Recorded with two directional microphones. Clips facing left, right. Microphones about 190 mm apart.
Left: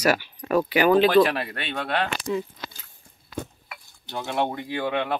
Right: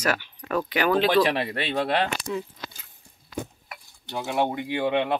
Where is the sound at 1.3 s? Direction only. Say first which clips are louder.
Right 4 dB; 25° right (ahead or behind).